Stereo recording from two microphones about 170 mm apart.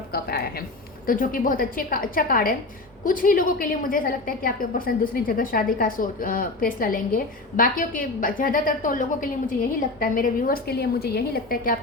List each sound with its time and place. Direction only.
0.1 s speech: 65° left (ahead or behind)
1.0 s a woman's voice: 55° left (ahead or behind)